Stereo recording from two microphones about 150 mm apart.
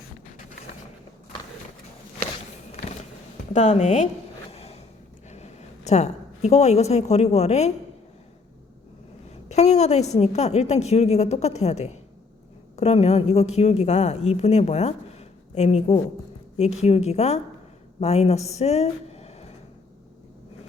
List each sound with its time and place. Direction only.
3.5 s a woman's voice: 50° left (ahead or behind)
4.5 s a sound: 45° left (ahead or behind)
5.3 s speech: 45° left (ahead or behind)
9.5 s a woman's voice: 45° left (ahead or behind)